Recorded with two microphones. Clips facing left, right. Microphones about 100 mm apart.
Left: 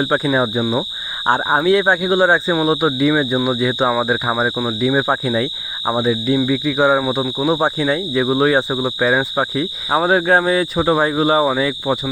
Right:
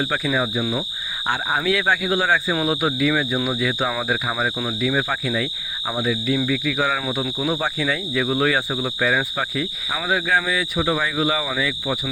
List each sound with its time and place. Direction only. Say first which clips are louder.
0.0 s speech: left 6 dB; 35° left (ahead or behind)